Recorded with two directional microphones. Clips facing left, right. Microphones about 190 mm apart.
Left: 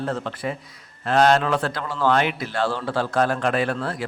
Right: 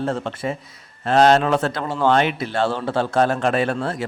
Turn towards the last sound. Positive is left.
turn(degrees=-25)  # may be behind; listen again after turning